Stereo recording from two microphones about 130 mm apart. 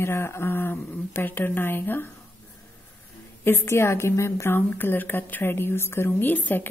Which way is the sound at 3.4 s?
15° left (ahead or behind).